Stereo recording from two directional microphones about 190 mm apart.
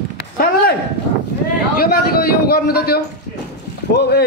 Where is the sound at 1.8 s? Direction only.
55° left (ahead or behind).